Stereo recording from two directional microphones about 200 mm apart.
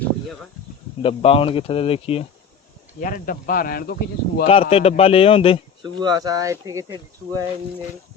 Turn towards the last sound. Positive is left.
turn(degrees=-15)  # may be behind; listen again after turning